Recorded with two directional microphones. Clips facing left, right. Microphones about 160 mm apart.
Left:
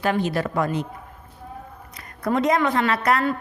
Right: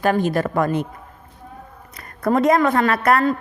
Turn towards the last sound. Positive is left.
turn(degrees=-50)  # may be behind; listen again after turning